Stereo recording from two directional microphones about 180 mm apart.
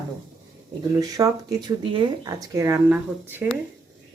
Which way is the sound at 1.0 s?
20° right (ahead or behind).